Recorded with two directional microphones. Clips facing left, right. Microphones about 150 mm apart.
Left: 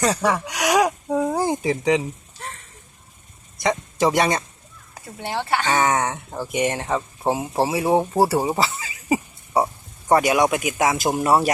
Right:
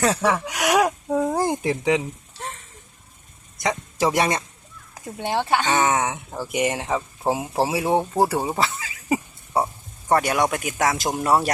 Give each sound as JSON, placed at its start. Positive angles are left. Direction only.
{"t": 0.0, "sound": "a sound", "side_deg": -5}
{"t": 3.6, "sound": "speech", "side_deg": -5}
{"t": 5.0, "sound": "speech", "side_deg": -15}
{"t": 5.7, "sound": "speech", "side_deg": 0}